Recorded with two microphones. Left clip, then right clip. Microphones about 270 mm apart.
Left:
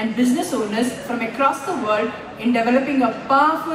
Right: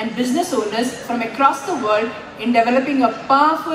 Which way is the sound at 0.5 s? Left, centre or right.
Right.